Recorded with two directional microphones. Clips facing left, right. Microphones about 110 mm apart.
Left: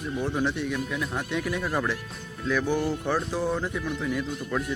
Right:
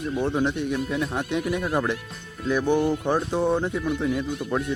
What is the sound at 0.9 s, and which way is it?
Speech, 30° right (ahead or behind).